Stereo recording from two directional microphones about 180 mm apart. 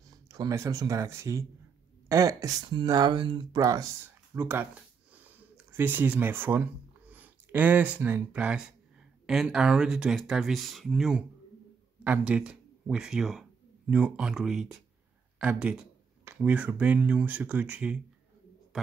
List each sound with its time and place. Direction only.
0.1 s speech: 20° right (ahead or behind)